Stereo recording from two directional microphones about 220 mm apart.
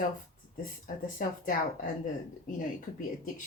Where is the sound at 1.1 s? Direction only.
40° left (ahead or behind).